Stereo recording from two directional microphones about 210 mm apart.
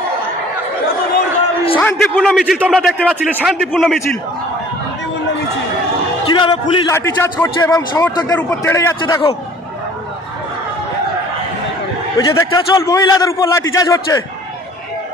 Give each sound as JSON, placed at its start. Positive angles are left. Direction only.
{"t": 1.8, "sound": "a man's voice", "side_deg": 10}
{"t": 6.3, "sound": "a man's voice", "side_deg": 25}
{"t": 12.2, "sound": "a man's voice", "side_deg": 15}